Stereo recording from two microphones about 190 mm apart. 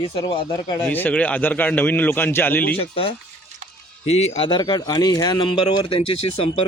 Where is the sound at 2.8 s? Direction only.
30° left (ahead or behind).